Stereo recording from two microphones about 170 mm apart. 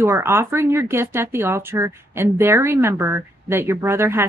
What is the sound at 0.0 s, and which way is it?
Speech, 15° right (ahead or behind).